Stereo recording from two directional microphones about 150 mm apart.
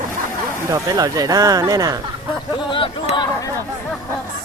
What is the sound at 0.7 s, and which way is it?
Speech, 25° right (ahead or behind).